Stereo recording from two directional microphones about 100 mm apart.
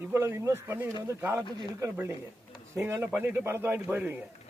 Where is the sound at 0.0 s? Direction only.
25° right (ahead or behind).